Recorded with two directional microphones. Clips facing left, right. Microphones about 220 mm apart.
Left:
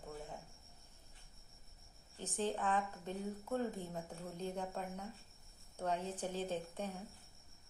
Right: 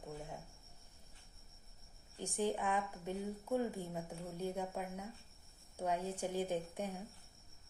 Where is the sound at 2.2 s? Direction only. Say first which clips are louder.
Right 2 dB; 15° right (ahead or behind).